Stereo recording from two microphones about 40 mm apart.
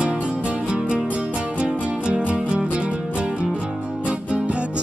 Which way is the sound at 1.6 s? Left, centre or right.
Right.